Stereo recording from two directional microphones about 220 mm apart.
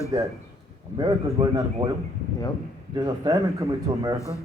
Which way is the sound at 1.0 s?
15° right (ahead or behind).